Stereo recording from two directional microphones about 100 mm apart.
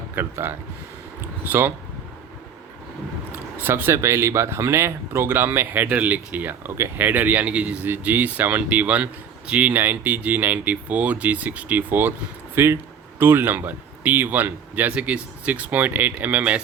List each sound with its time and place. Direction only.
0.2 s speech: 20° right (ahead or behind)
3.3 s speech: 20° right (ahead or behind)